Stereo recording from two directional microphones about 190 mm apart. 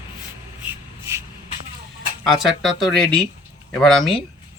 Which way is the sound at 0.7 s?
15° right (ahead or behind).